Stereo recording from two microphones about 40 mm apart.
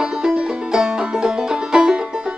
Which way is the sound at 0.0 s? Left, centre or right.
Centre.